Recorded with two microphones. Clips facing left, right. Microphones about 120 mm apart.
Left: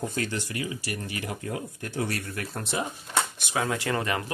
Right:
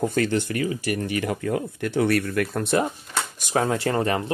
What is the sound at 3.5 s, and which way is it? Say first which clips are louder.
Speech: right 5 dB; 35° right (ahead or behind).